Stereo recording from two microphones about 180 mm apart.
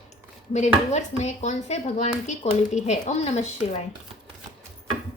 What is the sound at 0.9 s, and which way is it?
Speech, 40° left (ahead or behind).